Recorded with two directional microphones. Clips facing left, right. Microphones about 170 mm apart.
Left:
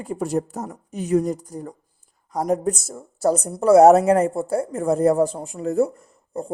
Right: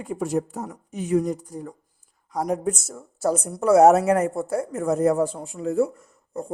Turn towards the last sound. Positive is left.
turn(degrees=30)  # may be behind; listen again after turning